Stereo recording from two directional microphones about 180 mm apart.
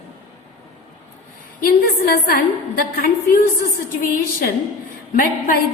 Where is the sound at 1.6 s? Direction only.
55° left (ahead or behind).